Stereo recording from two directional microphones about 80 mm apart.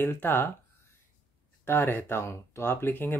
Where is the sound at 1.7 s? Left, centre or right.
Left.